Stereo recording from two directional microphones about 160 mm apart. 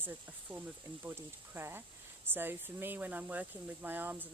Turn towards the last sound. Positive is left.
turn(degrees=-10)  # may be behind; listen again after turning